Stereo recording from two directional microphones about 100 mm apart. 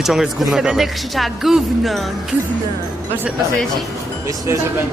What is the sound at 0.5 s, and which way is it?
Speech, 5° right (ahead or behind).